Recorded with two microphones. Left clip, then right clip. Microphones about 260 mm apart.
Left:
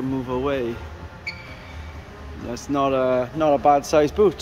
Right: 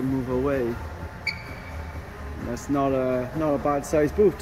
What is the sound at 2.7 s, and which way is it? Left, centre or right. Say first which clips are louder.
A man's voice: left 4 dB; centre.